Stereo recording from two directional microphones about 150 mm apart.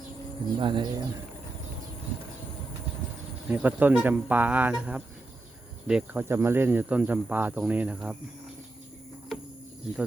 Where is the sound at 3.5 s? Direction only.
10° right (ahead or behind).